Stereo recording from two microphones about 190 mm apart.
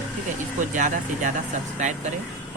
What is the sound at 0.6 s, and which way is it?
Speech, 40° right (ahead or behind).